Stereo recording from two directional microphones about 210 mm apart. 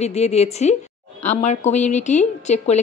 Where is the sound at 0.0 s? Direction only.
30° left (ahead or behind).